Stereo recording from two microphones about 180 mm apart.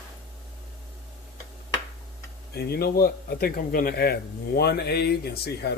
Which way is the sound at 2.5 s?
60° left (ahead or behind).